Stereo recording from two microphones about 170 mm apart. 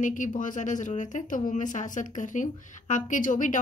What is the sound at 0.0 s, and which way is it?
Speech, 50° left (ahead or behind).